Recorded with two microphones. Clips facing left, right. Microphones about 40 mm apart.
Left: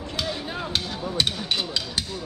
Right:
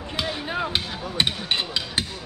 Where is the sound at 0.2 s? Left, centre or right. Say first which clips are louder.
Right 4 dB; centre.